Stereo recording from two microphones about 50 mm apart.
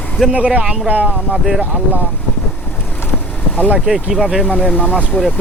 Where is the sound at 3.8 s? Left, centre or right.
Centre.